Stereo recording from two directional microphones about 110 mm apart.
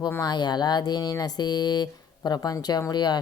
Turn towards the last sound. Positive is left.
turn(degrees=40)  # may be behind; listen again after turning